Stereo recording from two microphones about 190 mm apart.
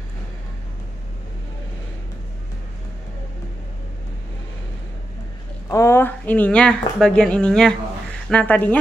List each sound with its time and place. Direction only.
5.7 s speech: 15° left (ahead or behind)